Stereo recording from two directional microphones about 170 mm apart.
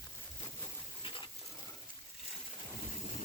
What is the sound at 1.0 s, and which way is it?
Pig, 30° left (ahead or behind).